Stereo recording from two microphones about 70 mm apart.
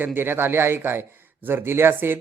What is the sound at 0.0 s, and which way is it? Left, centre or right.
A man's voice, right.